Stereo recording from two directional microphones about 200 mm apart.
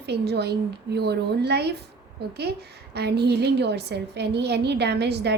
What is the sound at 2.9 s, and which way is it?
A woman's voice, 55° right (ahead or behind).